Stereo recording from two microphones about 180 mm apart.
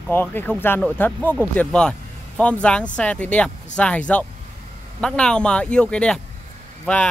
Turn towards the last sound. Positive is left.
turn(degrees=5)  # may be behind; listen again after turning